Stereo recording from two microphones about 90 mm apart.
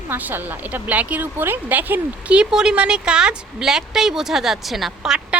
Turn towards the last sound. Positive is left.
turn(degrees=-5)  # may be behind; listen again after turning